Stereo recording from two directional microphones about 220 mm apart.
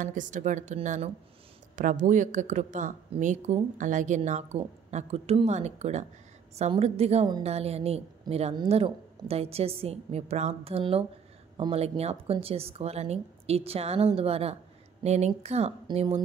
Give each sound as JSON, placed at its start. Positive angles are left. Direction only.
{"t": 0.0, "sound": "a woman's voice", "side_deg": -35}